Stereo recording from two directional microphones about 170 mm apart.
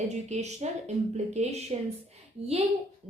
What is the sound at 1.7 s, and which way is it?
Speech, 35° right (ahead or behind).